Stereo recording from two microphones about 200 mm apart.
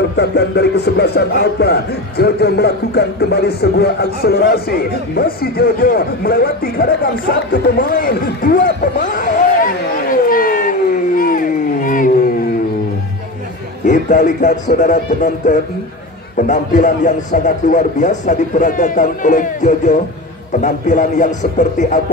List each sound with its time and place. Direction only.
0.2 s speech: 55° left (ahead or behind)
10.2 s cat: 45° left (ahead or behind)
13.8 s speech: 40° left (ahead or behind)